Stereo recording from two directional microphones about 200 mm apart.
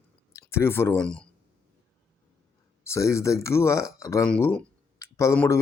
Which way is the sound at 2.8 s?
15° left (ahead or behind).